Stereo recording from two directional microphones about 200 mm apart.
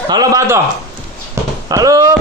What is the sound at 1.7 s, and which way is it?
Speech, 15° right (ahead or behind).